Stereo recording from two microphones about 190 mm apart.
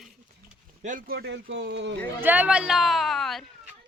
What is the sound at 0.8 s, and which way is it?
Speech, 50° right (ahead or behind).